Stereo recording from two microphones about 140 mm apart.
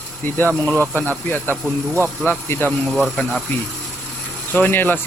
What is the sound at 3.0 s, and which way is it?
Speech, centre (ahead or behind).